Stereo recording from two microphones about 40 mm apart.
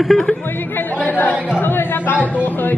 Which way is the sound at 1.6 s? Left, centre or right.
Left.